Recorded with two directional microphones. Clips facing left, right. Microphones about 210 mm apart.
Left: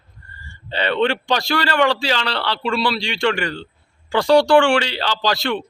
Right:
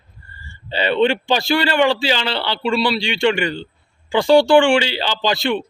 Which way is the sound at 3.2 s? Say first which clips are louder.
Right 3 dB; 25° right (ahead or behind).